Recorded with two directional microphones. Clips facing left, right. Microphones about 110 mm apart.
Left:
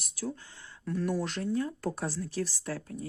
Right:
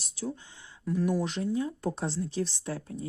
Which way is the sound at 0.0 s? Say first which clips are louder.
Right 1 dB; 25° right (ahead or behind).